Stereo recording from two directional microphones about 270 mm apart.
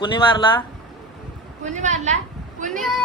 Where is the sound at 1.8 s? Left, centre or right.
Right.